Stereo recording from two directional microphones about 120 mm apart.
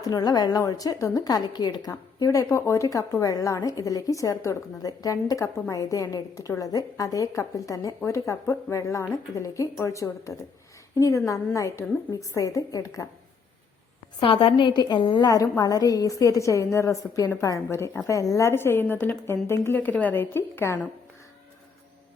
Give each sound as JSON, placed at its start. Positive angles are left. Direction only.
{"t": 0.1, "sound": "a woman's voice", "side_deg": 30}
{"t": 14.2, "sound": "a woman's voice", "side_deg": 45}
{"t": 15.3, "sound": "a woman's voice", "side_deg": 30}